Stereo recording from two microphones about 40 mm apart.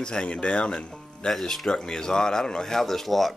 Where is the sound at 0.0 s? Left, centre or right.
Left.